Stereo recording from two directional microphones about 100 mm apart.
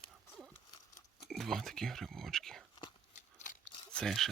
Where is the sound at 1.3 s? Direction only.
Centre (ahead or behind).